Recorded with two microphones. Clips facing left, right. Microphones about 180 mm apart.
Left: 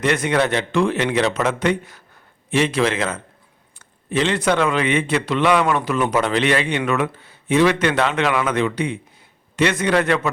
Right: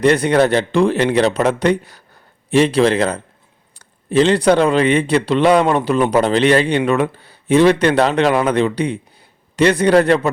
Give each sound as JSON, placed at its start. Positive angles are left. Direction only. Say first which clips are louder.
{"t": 0.0, "sound": "a man's voice", "louder": "right 6 dB", "side_deg": -35}